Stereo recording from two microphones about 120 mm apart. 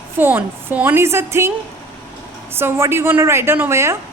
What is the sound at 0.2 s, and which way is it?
A woman's voice, 15° right (ahead or behind).